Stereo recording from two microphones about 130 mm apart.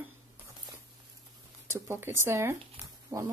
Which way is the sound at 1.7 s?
20° right (ahead or behind).